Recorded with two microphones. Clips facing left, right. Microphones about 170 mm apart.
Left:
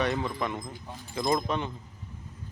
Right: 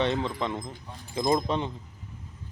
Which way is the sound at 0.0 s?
25° right (ahead or behind).